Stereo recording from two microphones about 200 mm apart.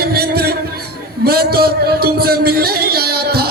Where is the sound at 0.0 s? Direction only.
50° right (ahead or behind).